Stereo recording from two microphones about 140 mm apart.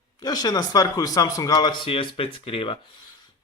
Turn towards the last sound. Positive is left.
turn(degrees=35)  # may be behind; listen again after turning